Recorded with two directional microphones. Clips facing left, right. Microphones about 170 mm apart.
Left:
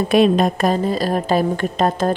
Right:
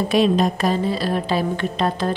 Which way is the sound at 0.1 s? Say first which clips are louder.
Left 4 dB; 55° left (ahead or behind).